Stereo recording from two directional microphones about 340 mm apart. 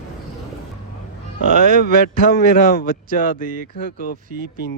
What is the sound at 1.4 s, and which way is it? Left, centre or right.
Speech, right.